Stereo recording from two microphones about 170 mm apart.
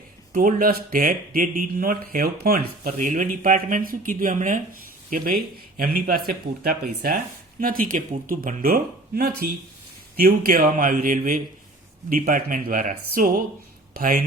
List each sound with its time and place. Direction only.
0.3 s speech: 55° right (ahead or behind)